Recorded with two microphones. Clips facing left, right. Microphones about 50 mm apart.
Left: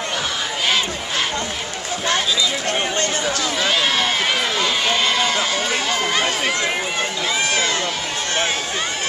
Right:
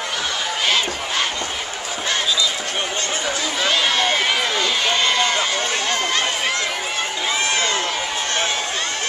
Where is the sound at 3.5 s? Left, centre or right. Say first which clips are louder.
Right 1 dB; centre.